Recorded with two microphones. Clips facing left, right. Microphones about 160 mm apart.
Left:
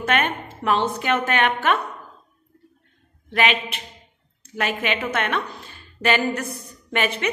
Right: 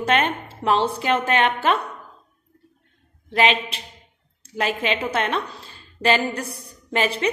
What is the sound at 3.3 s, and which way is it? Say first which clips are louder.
A woman's voice: right 2 dB; 30° right (ahead or behind).